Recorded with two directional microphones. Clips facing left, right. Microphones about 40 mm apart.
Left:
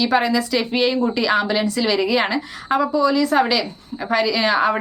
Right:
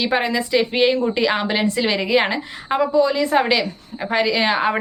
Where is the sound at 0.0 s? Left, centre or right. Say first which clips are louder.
Left 2 dB; right.